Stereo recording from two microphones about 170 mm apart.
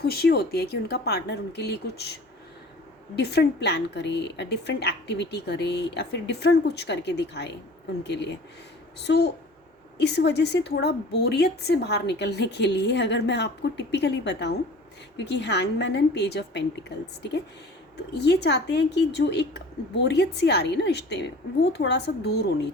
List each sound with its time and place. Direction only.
0.0 s speech: 65° left (ahead or behind)
3.2 s a woman's voice: 75° left (ahead or behind)
18.1 s a woman's voice: 80° left